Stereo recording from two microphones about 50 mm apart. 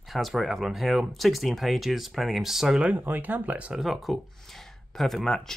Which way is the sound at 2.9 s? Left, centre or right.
Right.